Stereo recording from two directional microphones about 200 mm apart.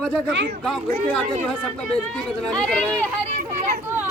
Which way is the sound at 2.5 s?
5° left (ahead or behind).